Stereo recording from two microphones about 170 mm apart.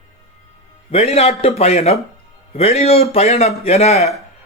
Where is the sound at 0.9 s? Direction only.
40° left (ahead or behind).